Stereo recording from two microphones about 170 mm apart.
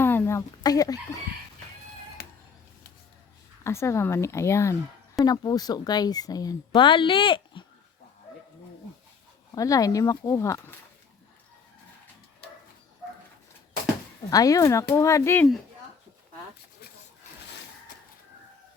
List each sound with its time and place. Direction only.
0.0 s chicken: 15° left (ahead or behind)
3.6 s speech: 15° left (ahead or behind)
9.6 s speech: 20° left (ahead or behind)
14.3 s speech: 20° left (ahead or behind)